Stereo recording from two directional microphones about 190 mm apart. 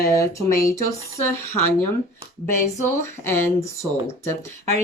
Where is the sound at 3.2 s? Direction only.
10° left (ahead or behind).